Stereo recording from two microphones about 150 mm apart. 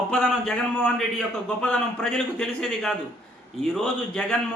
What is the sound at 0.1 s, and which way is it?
A man's voice, 5° left (ahead or behind).